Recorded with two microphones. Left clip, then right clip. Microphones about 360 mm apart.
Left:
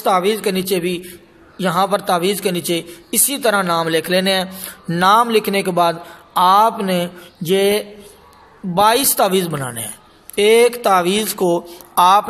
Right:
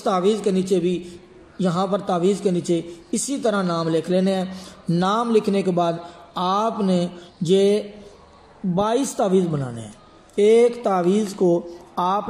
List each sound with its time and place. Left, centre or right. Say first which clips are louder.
0.0 s a man's voice: left 4 dB; left